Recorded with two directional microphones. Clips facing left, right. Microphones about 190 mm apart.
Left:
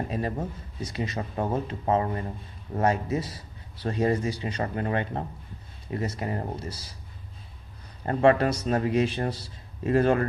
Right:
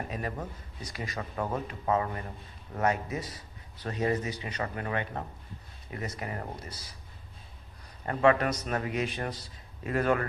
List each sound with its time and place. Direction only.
0.1 s a man's voice: 25° left (ahead or behind)
8.0 s a man's voice: 35° left (ahead or behind)